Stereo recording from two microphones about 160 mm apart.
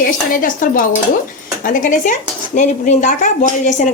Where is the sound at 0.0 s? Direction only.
55° left (ahead or behind).